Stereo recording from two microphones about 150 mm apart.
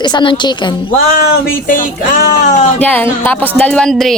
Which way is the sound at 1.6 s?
65° left (ahead or behind).